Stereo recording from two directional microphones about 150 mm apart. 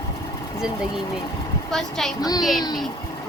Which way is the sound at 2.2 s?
25° left (ahead or behind).